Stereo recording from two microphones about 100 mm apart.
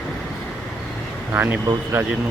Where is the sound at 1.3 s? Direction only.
20° right (ahead or behind).